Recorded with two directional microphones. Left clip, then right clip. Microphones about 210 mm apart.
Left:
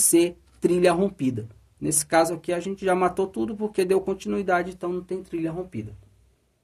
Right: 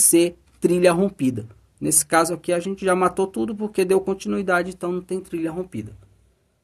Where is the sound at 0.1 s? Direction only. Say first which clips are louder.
Right 1 dB; 20° right (ahead or behind).